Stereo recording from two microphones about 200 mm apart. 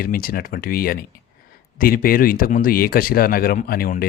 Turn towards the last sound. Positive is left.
turn(degrees=45)  # may be behind; listen again after turning